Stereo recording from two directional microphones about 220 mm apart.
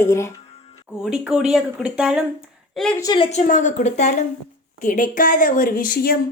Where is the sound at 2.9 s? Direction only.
20° left (ahead or behind).